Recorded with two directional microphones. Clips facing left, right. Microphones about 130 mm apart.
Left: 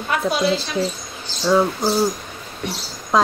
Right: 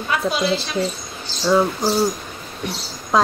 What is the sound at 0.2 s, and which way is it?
Speech, centre (ahead or behind).